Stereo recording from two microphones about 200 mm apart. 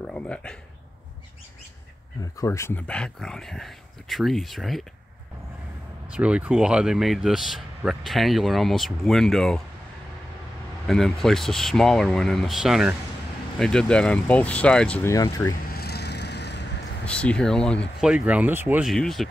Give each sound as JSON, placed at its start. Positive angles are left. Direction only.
{"t": 0.0, "sound": "speech", "side_deg": 5}
{"t": 2.3, "sound": "speech", "side_deg": 15}
{"t": 6.1, "sound": "speech", "side_deg": -5}
{"t": 10.9, "sound": "speech", "side_deg": 0}
{"t": 15.6, "sound": "vehicle", "side_deg": 50}
{"t": 17.0, "sound": "speech", "side_deg": 5}
{"t": 18.1, "sound": "speech", "side_deg": -5}